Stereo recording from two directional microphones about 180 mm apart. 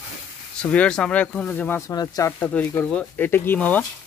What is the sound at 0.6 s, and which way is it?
Speech, 5° left (ahead or behind).